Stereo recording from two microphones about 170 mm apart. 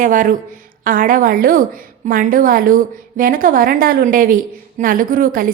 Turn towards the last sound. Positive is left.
turn(degrees=-55)  # may be behind; listen again after turning